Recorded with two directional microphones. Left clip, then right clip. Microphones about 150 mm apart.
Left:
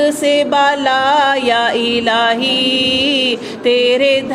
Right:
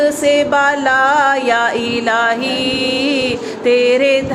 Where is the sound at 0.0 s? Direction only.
50° left (ahead or behind).